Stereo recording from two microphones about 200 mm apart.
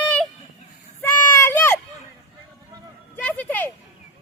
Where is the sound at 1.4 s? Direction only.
10° left (ahead or behind).